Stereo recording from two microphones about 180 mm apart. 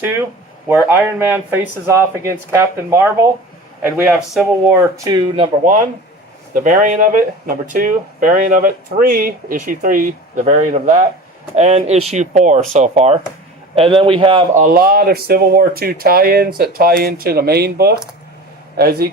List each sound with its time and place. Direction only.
0.7 s a man's voice: 10° right (ahead or behind)
5.1 s speech: 30° right (ahead or behind)
6.5 s speech: 45° right (ahead or behind); by 14.4 s 30° right (ahead or behind)
14.5 s speech: 50° right (ahead or behind)